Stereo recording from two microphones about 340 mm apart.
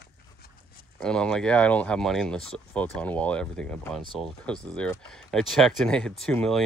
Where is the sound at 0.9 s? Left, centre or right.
Centre.